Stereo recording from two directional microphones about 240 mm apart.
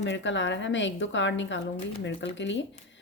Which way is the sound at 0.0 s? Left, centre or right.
Left.